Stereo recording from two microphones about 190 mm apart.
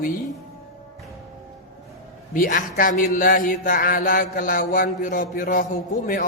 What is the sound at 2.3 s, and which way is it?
Speech, 45° left (ahead or behind).